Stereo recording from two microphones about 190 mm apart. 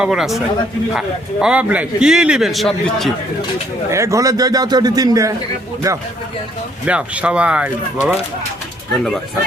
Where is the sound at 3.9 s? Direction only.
15° right (ahead or behind).